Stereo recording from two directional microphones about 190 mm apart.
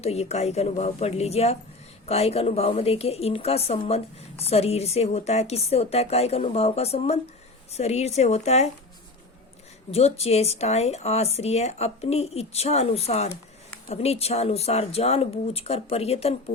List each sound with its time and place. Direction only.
0.0 s a woman's voice: 35° left (ahead or behind)
9.9 s a woman's voice: 35° left (ahead or behind)